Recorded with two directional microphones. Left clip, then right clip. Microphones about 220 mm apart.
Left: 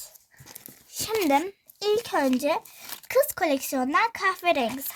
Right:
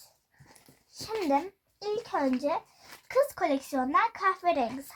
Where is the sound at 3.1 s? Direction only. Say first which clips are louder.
Left 4 dB; 50° left (ahead or behind).